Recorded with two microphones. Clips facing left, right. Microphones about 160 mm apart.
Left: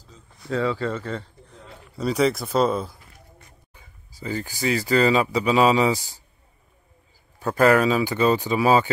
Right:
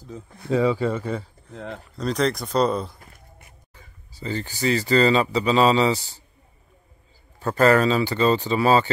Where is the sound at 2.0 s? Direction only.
10° left (ahead or behind).